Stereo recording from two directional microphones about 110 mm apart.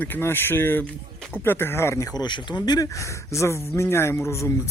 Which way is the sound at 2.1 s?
40° left (ahead or behind).